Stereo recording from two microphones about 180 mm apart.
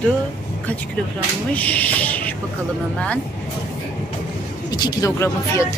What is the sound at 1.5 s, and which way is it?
Music, 10° left (ahead or behind).